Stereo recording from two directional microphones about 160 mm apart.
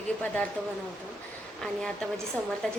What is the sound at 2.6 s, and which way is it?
Speech, 5° left (ahead or behind).